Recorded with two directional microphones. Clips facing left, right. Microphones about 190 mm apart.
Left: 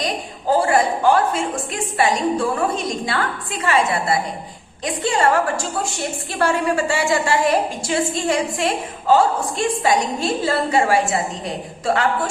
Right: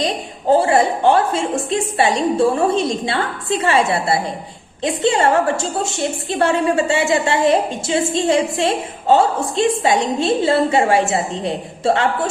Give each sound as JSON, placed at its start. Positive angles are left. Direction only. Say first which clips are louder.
{"t": 0.0, "sound": "a woman's voice", "louder": "right 3 dB", "side_deg": -25}